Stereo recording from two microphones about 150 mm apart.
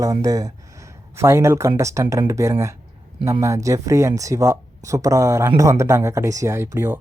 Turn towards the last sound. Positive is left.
turn(degrees=-15)  # may be behind; listen again after turning